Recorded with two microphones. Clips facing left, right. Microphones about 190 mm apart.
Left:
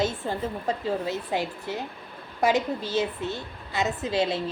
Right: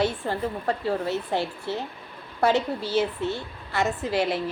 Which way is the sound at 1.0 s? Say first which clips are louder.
Right 2 dB; 15° left (ahead or behind).